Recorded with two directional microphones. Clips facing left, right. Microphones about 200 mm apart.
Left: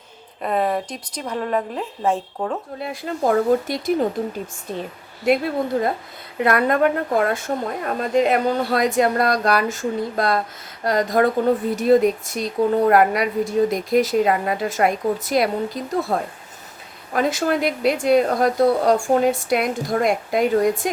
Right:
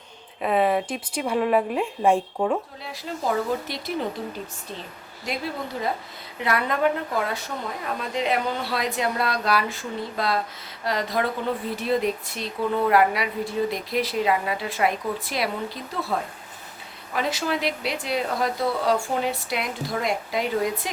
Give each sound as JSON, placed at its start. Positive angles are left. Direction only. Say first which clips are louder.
{"t": 0.4, "sound": "speech", "louder": "even", "side_deg": -5}
{"t": 2.8, "sound": "a woman's voice", "louder": "left 6 dB", "side_deg": 55}
{"t": 5.3, "sound": "a woman's voice", "louder": "left 11 dB", "side_deg": 60}